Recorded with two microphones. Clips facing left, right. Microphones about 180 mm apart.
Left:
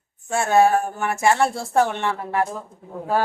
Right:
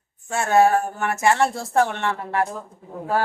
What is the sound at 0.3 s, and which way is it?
Speech, 15° left (ahead or behind).